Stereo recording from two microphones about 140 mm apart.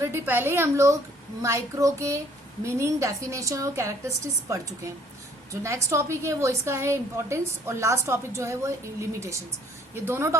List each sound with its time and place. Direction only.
0.0 s a woman's voice: 15° right (ahead or behind)
5.6 s a woman's voice: 20° right (ahead or behind)